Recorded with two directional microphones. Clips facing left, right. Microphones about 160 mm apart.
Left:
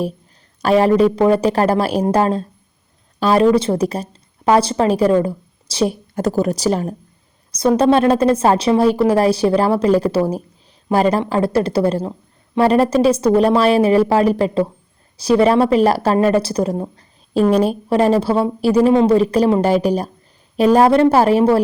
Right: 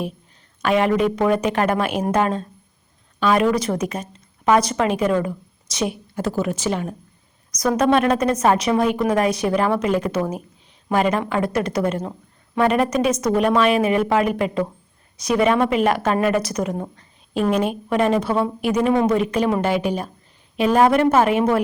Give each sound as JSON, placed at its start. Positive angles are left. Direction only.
{"t": 0.6, "sound": "a woman's voice", "side_deg": 35}